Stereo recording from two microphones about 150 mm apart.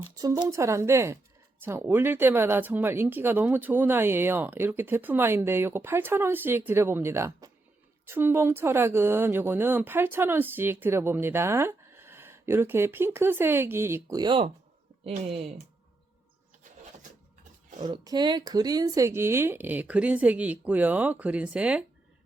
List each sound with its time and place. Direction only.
0.2 s a woman's voice: 25° right (ahead or behind)
17.8 s speech: 25° right (ahead or behind); by 21.8 s 5° right (ahead or behind)